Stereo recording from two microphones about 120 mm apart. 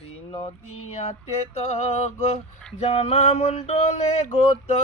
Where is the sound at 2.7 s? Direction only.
60° left (ahead or behind).